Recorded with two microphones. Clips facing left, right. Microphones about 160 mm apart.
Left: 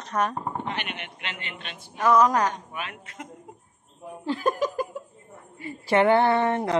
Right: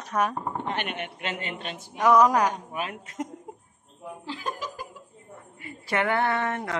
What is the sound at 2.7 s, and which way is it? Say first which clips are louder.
Speech: right 3 dB; 35° right (ahead or behind).